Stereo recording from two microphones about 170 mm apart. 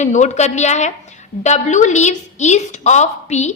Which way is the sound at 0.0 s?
45° left (ahead or behind).